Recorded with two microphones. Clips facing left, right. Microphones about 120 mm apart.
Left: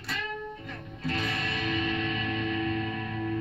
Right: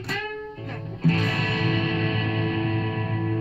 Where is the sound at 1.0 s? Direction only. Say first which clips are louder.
Right 7 dB; 50° right (ahead or behind).